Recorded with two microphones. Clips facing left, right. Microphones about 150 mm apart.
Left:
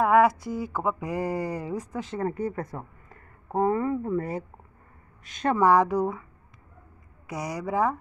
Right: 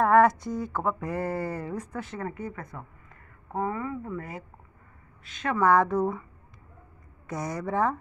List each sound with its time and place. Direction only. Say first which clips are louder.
0.0 s speech: even; 5° left (ahead or behind)
2.1 s a woman's voice: left 9 dB; 35° left (ahead or behind)
5.6 s speech: left 1 dB; 20° left (ahead or behind)
5.9 s speech: even; centre (ahead or behind)
7.2 s speech: even; 10° left (ahead or behind)